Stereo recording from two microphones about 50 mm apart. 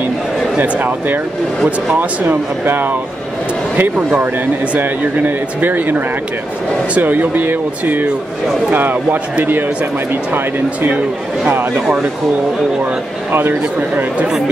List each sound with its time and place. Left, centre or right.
0.6 s speech: right
4.7 s speech: right
11.5 s speech: right
13.3 s a man's voice: right